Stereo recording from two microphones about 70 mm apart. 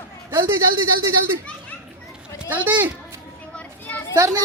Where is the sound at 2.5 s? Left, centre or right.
Right.